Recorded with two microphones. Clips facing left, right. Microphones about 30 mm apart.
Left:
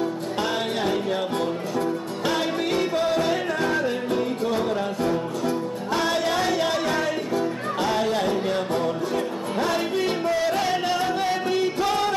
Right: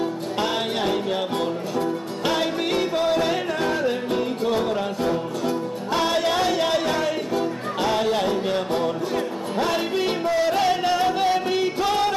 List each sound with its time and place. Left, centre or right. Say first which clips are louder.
0.0 s music: right 1 dB; centre